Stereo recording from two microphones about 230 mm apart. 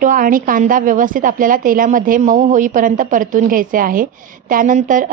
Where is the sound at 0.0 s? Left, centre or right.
Right.